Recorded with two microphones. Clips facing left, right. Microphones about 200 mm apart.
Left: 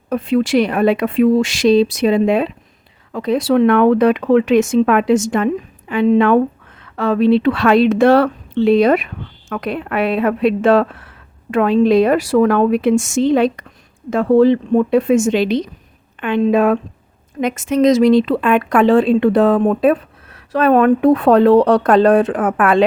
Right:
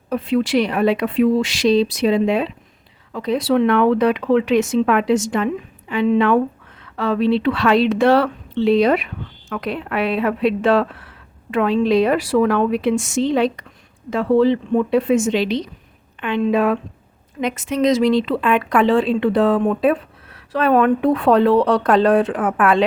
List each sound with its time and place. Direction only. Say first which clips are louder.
0.1 s a woman's voice: left 3 dB; 45° left (ahead or behind)